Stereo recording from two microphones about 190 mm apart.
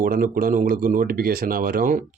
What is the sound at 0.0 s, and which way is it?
A man's voice, 50° right (ahead or behind).